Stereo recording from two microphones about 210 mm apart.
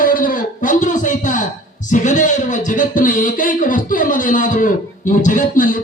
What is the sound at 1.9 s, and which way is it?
Speech, 35° left (ahead or behind).